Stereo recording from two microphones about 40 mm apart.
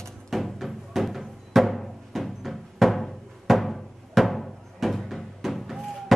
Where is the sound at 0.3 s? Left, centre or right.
Centre.